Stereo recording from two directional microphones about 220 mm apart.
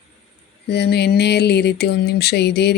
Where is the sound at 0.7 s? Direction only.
50° left (ahead or behind).